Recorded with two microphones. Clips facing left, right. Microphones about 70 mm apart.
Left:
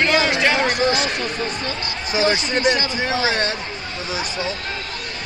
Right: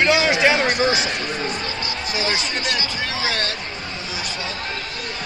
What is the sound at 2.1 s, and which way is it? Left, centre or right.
Speech, left.